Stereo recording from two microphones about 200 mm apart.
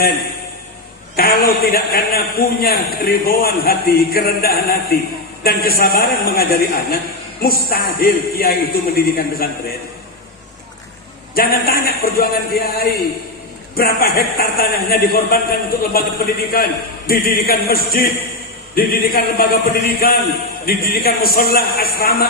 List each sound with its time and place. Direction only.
1.1 s a man's voice: 50° left (ahead or behind)
11.3 s a man's voice: 45° left (ahead or behind)